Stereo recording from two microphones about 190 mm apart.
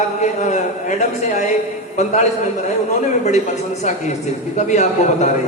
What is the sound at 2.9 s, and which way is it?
A man's voice, 35° left (ahead or behind).